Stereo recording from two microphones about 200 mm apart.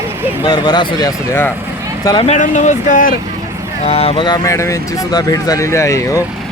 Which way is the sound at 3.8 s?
30° left (ahead or behind).